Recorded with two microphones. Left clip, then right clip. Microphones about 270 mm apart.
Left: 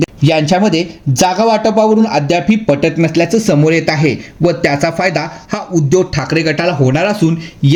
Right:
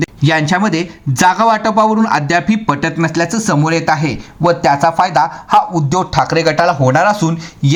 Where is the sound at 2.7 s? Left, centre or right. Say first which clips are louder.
Left 4 dB; right.